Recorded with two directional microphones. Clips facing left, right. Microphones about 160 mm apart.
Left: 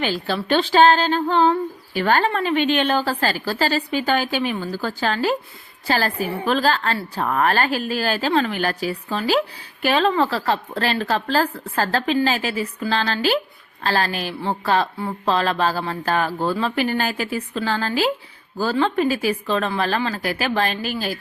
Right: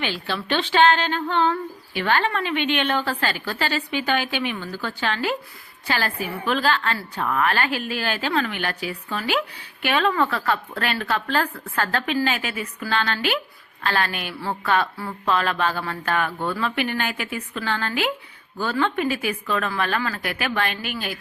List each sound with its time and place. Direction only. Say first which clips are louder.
0.0 s speech: left 4 dB; 40° left (ahead or behind)